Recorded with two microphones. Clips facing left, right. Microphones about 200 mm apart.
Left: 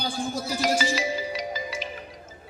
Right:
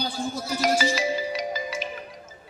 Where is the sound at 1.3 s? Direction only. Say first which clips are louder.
Right 2 dB; 50° right (ahead or behind).